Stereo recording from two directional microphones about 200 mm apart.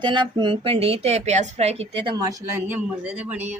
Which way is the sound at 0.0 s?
25° right (ahead or behind).